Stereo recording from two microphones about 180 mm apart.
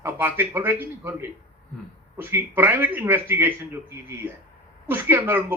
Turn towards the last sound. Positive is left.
turn(degrees=-10)  # may be behind; listen again after turning